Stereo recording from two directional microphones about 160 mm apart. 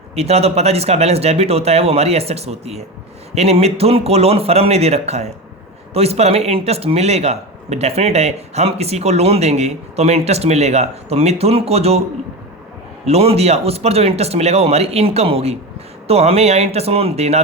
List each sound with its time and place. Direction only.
0.2 s speech: 40° right (ahead or behind)
13.1 s speech: 40° right (ahead or behind)